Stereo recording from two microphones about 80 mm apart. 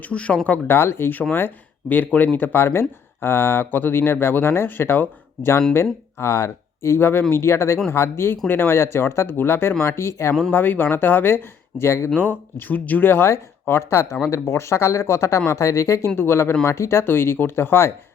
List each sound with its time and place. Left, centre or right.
0.0 s speech: centre
0.8 s speech: left